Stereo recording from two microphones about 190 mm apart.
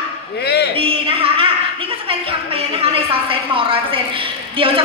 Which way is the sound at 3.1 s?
30° right (ahead or behind).